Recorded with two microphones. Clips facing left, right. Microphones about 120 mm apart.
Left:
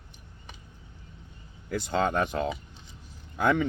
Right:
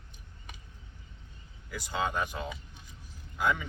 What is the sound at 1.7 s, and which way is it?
Speech, 55° left (ahead or behind).